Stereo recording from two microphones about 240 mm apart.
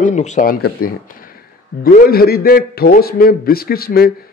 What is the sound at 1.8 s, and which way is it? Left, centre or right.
A man's voice, left.